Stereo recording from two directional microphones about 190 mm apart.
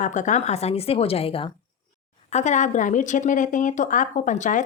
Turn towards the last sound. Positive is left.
turn(degrees=40)  # may be behind; listen again after turning